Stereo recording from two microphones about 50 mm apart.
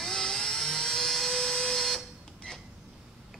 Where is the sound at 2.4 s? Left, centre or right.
Centre.